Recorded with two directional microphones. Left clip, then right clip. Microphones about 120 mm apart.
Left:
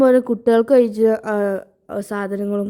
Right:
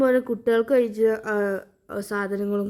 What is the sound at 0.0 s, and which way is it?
Speech, 40° left (ahead or behind).